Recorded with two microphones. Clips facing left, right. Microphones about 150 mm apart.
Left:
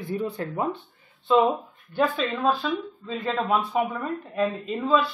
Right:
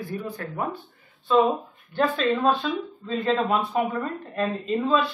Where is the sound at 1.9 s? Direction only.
10° left (ahead or behind).